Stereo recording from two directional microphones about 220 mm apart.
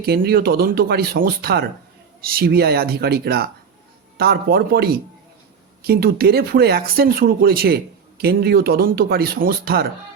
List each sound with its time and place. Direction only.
0.0 s speech: 45° right (ahead or behind)